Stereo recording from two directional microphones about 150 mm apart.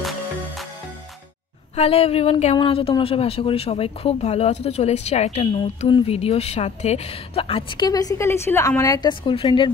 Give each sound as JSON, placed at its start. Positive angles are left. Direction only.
{"t": 1.8, "sound": "a woman's voice", "side_deg": 40}
{"t": 5.9, "sound": "a woman's voice", "side_deg": 35}
{"t": 7.8, "sound": "a woman's voice", "side_deg": 25}